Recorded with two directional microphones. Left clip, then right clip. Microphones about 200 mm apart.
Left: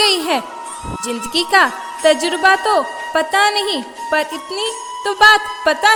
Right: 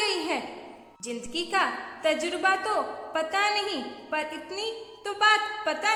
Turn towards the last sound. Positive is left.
turn(degrees=45)  # may be behind; listen again after turning